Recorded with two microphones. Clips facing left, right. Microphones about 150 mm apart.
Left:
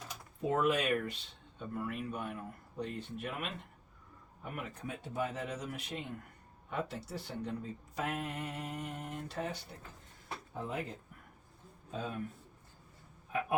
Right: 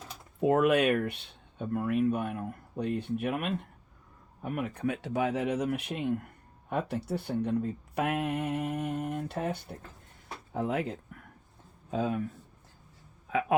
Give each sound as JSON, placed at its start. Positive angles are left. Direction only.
{"t": 0.4, "sound": "speech", "side_deg": -65}
{"t": 4.5, "sound": "speech", "side_deg": -65}
{"t": 10.5, "sound": "speech", "side_deg": -90}